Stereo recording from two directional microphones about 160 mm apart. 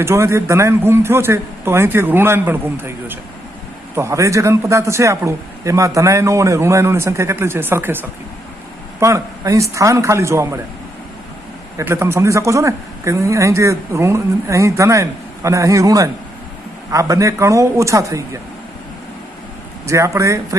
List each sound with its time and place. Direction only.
0.0 s a man's voice: 15° right (ahead or behind)
9.0 s a man's voice: 20° right (ahead or behind)
11.8 s a man's voice: 15° right (ahead or behind)
19.9 s a man's voice: 20° right (ahead or behind)